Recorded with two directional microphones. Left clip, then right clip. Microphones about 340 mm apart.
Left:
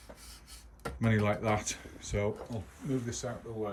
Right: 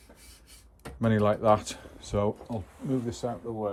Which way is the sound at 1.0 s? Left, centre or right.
Centre.